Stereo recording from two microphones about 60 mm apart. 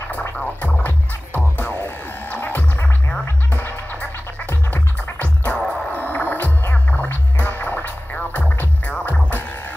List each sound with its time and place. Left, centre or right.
0.4 s music: left
1.4 s music: left
2.2 s music: left